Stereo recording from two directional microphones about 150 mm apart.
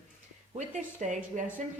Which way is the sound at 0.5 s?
55° right (ahead or behind).